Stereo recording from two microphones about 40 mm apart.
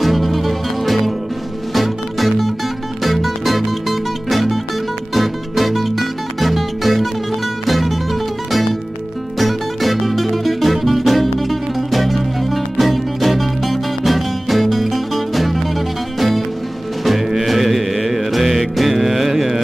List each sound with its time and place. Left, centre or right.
0.0 s music: centre